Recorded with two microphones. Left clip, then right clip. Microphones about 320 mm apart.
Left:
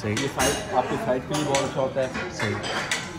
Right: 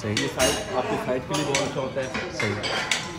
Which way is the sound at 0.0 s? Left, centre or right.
Centre.